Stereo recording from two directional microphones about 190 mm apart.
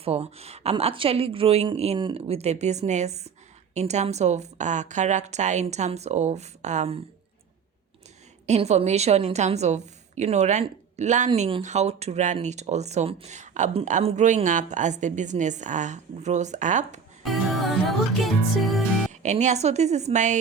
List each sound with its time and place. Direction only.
0.0 s speech: 30° right (ahead or behind)
8.4 s speech: 35° right (ahead or behind)
11.3 s speech: 30° right (ahead or behind)
17.2 s music: centre (ahead or behind)
19.2 s speech: 40° right (ahead or behind)